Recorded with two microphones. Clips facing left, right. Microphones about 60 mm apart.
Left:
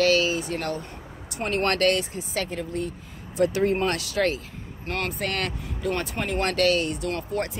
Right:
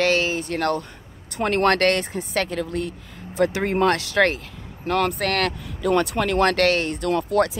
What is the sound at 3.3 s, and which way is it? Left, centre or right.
Speech, right.